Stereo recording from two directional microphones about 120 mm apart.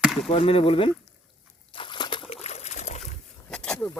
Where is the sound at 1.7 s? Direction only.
45° left (ahead or behind).